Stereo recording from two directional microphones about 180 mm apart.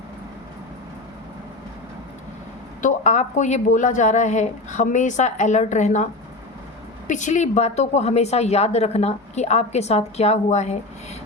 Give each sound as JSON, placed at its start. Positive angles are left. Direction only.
{"t": 2.8, "sound": "a woman's voice", "side_deg": 40}
{"t": 7.1, "sound": "a woman's voice", "side_deg": 40}